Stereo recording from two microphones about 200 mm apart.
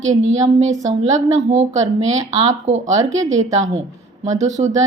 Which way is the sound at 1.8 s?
75° right (ahead or behind).